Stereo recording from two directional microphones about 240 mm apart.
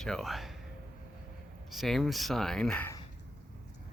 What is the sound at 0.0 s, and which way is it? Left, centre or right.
Speech, centre.